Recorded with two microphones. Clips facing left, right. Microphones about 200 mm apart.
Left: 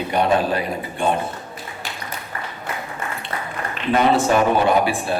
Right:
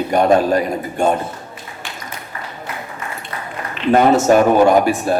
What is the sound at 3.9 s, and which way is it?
A man's voice, 45° right (ahead or behind).